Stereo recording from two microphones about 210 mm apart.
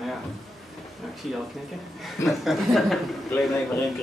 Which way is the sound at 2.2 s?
Centre (ahead or behind).